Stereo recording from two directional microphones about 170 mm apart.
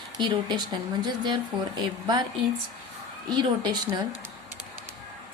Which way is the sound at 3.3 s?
25° right (ahead or behind).